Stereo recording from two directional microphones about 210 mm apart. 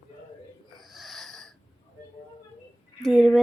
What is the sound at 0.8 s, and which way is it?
Wheeze, centre (ahead or behind).